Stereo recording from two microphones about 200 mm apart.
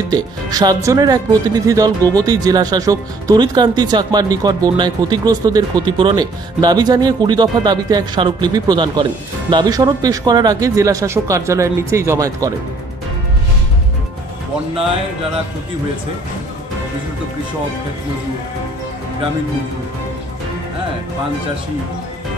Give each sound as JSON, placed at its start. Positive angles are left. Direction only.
{"t": 0.1, "sound": "speech", "side_deg": -20}